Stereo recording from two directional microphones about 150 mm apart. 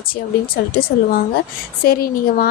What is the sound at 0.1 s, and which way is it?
A woman's voice, 80° left.